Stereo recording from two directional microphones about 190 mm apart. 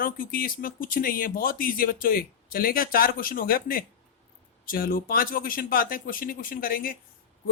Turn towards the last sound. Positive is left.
turn(degrees=50)  # may be behind; listen again after turning